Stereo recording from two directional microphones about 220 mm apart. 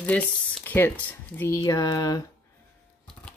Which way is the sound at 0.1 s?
5° left (ahead or behind).